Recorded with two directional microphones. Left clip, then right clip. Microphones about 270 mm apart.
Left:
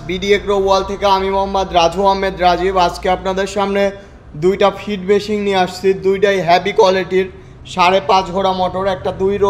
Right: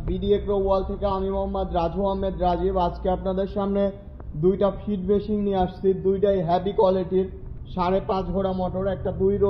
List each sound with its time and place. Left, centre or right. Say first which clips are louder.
0.3 s speech: left 9 dB; left